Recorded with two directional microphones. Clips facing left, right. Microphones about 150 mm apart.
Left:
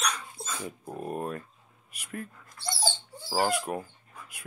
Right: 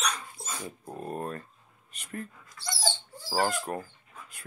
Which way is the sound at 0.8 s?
10° left (ahead or behind).